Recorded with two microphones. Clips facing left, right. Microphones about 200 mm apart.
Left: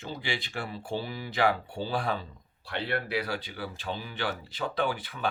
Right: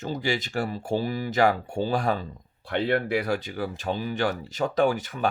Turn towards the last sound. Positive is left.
turn(degrees=-45)  # may be behind; listen again after turning